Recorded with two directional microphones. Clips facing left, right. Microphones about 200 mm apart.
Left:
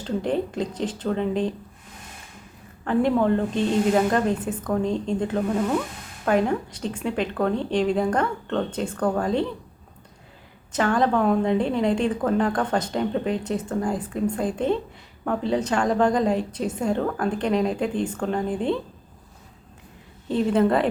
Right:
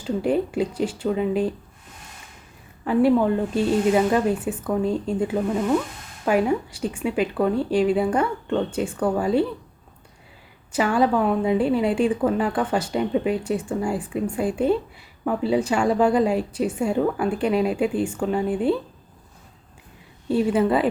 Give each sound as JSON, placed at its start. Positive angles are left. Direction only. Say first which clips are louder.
{"t": 0.0, "sound": "a woman's voice", "louder": "right 3 dB", "side_deg": -10}
{"t": 2.8, "sound": "a woman's voice", "louder": "right 2 dB", "side_deg": -5}
{"t": 10.7, "sound": "a woman's voice", "louder": "right 1 dB", "side_deg": -10}
{"t": 20.2, "sound": "a woman's voice", "louder": "right 1 dB", "side_deg": -10}